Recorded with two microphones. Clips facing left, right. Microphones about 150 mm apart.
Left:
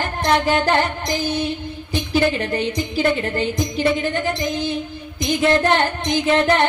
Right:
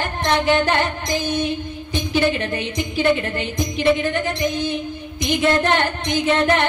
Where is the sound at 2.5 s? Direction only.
40° left (ahead or behind).